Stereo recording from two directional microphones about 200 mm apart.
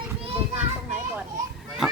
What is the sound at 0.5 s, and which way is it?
Children playing, 10° right (ahead or behind).